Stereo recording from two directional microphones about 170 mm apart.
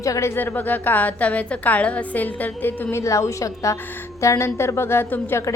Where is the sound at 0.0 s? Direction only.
20° left (ahead or behind).